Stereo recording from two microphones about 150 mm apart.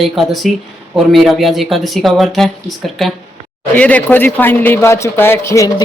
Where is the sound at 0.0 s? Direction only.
Centre (ahead or behind).